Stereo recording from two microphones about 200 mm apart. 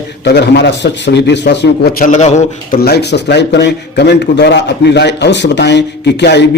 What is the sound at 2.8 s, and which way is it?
A man's voice, 55° left (ahead or behind).